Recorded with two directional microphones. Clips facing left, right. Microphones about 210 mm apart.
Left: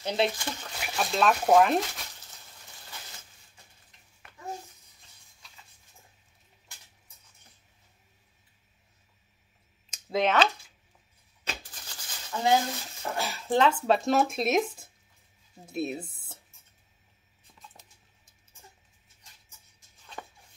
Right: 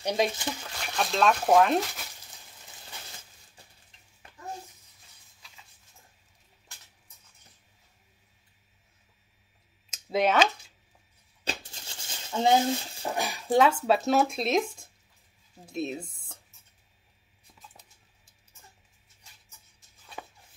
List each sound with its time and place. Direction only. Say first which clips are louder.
0.0 s speech: right 1 dB; 15° right (ahead or behind)
0.7 s speech: left 1 dB; 5° left (ahead or behind)
10.1 s speech: right 1 dB; 10° right (ahead or behind)
11.4 s a sound: right 3 dB; 25° right (ahead or behind)
13.1 s speech: right 2 dB; 15° right (ahead or behind); by 16.3 s 5° left (ahead or behind)